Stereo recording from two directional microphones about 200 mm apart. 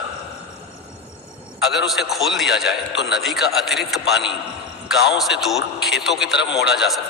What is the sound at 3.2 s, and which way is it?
Speech, centre (ahead or behind).